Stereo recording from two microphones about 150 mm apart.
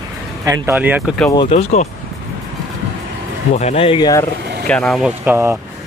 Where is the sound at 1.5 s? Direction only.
50° left (ahead or behind).